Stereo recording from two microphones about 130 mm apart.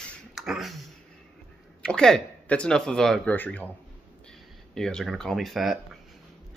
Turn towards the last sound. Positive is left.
turn(degrees=0)  # may be behind; listen again after turning